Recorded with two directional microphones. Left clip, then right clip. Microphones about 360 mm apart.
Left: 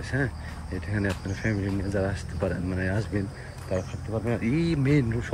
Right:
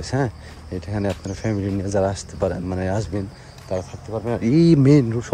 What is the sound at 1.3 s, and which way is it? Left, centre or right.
Speech, centre.